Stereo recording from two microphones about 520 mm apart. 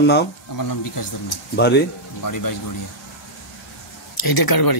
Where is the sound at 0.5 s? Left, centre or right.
Left.